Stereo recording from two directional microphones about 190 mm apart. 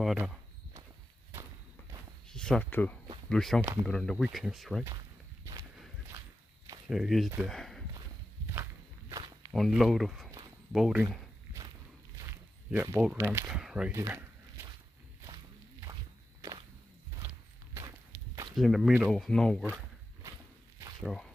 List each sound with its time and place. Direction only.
0.0 s speech: centre (ahead or behind)
2.2 s speech: 5° left (ahead or behind)
5.4 s walk: 15° right (ahead or behind)
6.9 s speech: centre (ahead or behind)
9.1 s walk: 20° right (ahead or behind)
9.5 s speech: centre (ahead or behind)
12.2 s speech: 15° right (ahead or behind)
13.9 s a sound: 15° right (ahead or behind)
15.8 s walk: 20° right (ahead or behind)
18.5 s speech: centre (ahead or behind)
21.0 s speech: centre (ahead or behind)